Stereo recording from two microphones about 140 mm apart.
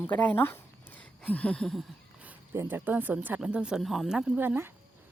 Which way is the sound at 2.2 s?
15° right (ahead or behind).